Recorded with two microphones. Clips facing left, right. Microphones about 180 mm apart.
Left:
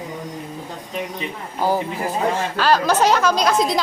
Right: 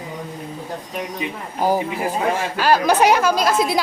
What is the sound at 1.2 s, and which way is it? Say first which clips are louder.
A woman's voice: right 1 dB; 15° right (ahead or behind).